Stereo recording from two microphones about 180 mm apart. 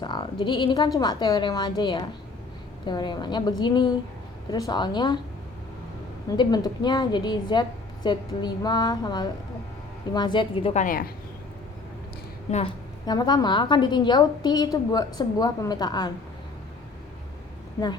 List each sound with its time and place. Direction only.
0.0 s a woman's voice: 25° left (ahead or behind)
6.3 s a woman's voice: 25° left (ahead or behind)
10.8 s speech: 50° left (ahead or behind)
12.5 s a woman's voice: 35° left (ahead or behind)
13.1 s a woman's voice: 20° left (ahead or behind)